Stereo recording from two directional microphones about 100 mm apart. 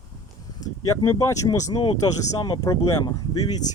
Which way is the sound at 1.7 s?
60° left (ahead or behind).